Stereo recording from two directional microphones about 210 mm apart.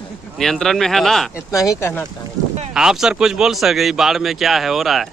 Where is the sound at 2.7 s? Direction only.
5° right (ahead or behind).